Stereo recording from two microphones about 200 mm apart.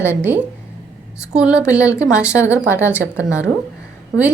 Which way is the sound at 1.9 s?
15° left (ahead or behind).